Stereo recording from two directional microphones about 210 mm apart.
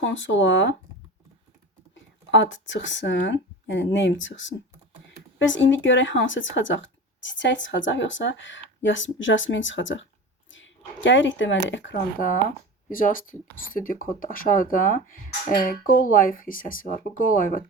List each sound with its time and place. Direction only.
0.0 s speech: 60° left (ahead or behind)
2.3 s speech: 60° left (ahead or behind)
12.9 s speech: 40° left (ahead or behind)